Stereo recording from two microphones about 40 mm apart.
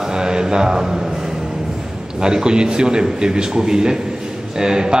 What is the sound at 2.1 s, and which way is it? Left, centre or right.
A man's voice, centre.